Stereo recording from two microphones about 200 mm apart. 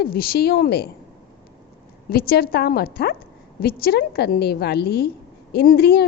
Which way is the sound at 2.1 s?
50° left (ahead or behind).